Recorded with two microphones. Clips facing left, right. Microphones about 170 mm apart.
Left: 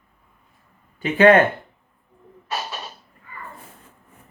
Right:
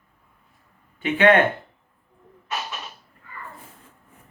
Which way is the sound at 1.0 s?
40° left (ahead or behind).